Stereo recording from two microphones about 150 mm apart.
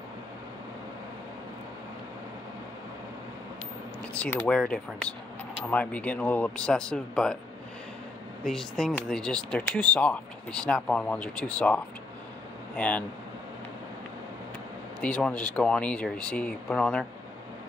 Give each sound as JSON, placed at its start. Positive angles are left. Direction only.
{"t": 4.2, "sound": "speech", "side_deg": 10}
{"t": 8.5, "sound": "speech", "side_deg": 5}
{"t": 15.0, "sound": "speech", "side_deg": 5}